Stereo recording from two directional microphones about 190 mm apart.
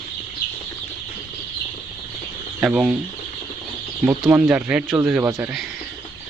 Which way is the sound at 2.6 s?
5° right (ahead or behind).